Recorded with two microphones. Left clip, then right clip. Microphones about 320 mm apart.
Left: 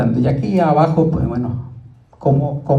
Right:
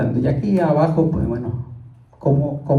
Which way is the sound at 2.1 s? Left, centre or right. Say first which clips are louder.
Left 2 dB; left.